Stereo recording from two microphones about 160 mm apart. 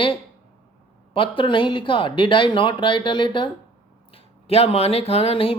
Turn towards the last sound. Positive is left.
turn(degrees=35)  # may be behind; listen again after turning